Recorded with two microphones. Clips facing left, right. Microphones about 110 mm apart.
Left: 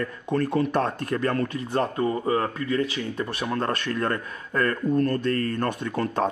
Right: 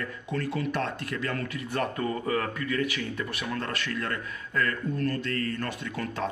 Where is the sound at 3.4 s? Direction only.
40° left (ahead or behind).